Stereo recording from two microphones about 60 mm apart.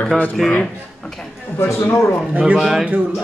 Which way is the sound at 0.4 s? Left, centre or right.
Centre.